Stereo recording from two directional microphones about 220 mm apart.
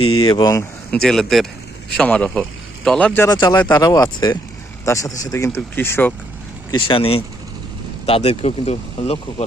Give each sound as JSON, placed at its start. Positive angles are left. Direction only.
{"t": 0.3, "sound": "a man's voice", "side_deg": 15}
{"t": 1.0, "sound": "a man's voice", "side_deg": 0}
{"t": 3.3, "sound": "a man's voice", "side_deg": 20}
{"t": 6.7, "sound": "speech", "side_deg": 25}